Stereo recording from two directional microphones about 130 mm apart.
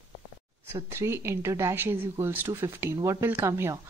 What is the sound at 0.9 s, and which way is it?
A woman's voice, 20° right (ahead or behind).